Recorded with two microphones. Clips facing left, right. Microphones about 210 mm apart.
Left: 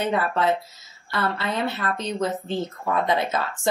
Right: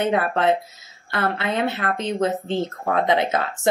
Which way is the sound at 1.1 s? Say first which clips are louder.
Right 3 dB; 20° right (ahead or behind).